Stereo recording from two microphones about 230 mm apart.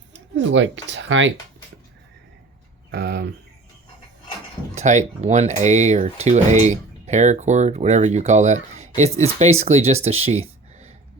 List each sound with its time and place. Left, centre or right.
0.3 s speech: right
2.9 s speech: right
4.7 s speech: right